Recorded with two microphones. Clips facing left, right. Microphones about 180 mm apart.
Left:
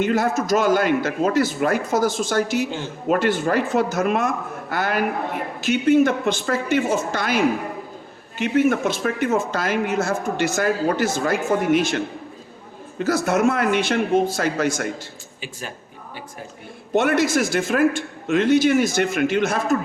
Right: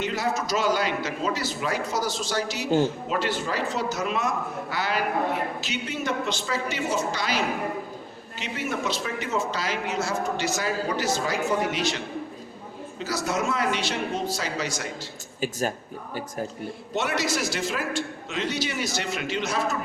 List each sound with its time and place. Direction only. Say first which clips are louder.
0.0 s speech: left 7 dB; 50° left (ahead or behind)
2.6 s speech: right 7 dB; 45° right (ahead or behind)
3.1 s speech: left 8 dB; 55° left (ahead or behind)
15.4 s speech: right 8 dB; 40° right (ahead or behind)
16.9 s speech: left 9 dB; 55° left (ahead or behind)